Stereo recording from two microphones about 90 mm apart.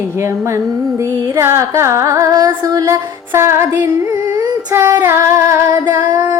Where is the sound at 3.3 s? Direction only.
30° right (ahead or behind).